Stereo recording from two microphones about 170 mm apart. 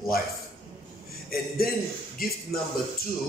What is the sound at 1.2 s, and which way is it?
A man's voice, 60° left (ahead or behind).